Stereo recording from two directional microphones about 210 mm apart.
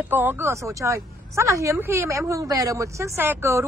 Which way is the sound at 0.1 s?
10° right (ahead or behind).